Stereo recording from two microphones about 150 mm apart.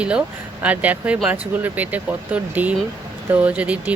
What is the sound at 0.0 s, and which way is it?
Speech, 5° right (ahead or behind).